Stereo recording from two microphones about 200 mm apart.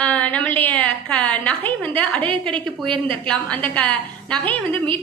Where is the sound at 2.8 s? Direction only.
25° right (ahead or behind).